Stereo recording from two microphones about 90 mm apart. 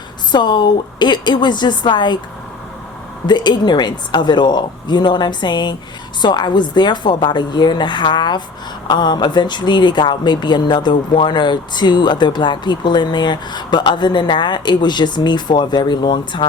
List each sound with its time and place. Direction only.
0.3 s speech: 55° left (ahead or behind)
3.2 s speech: 55° left (ahead or behind)